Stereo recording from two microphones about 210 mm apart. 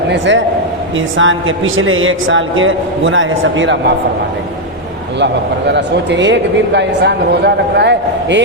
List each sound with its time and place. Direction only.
0.1 s a man's voice: 60° right (ahead or behind)
5.2 s speech: 55° right (ahead or behind)